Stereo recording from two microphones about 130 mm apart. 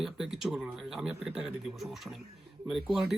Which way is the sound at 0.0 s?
Centre (ahead or behind).